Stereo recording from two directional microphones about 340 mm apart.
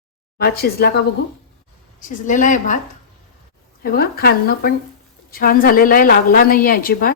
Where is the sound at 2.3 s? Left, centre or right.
Left.